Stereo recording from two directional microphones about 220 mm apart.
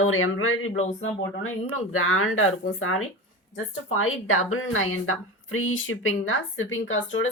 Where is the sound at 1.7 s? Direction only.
70° left (ahead or behind).